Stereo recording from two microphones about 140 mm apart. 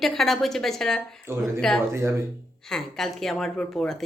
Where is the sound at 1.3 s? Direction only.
20° right (ahead or behind).